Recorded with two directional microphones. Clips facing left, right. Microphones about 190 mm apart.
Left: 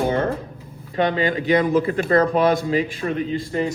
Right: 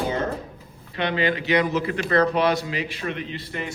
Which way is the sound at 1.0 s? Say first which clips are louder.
Left 4 dB; 40° left (ahead or behind).